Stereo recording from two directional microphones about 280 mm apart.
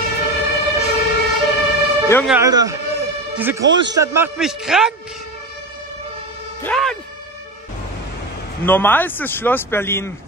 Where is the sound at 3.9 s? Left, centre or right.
Centre.